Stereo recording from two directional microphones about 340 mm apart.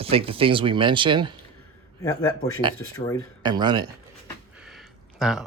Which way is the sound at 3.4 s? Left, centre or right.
Centre.